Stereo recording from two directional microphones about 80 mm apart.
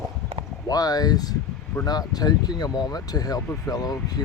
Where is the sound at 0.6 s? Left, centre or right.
Left.